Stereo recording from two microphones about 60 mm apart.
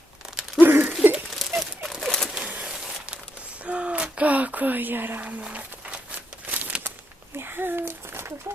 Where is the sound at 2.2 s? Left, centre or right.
Centre; by 6.9 s right.